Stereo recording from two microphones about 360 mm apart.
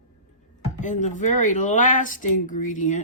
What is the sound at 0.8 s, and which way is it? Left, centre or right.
Speech, centre.